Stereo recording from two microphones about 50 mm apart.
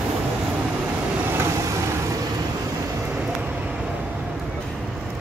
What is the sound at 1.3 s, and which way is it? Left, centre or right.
Boat, right.